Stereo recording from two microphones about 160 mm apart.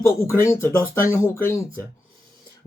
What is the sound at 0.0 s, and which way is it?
Speech, 15° left (ahead or behind).